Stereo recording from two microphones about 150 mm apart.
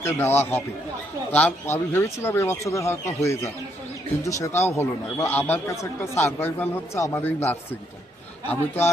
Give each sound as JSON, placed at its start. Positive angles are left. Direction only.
{"t": 0.0, "sound": "a man's voice", "side_deg": 15}